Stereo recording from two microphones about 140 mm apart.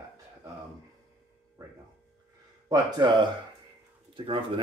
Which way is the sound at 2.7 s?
35° right (ahead or behind).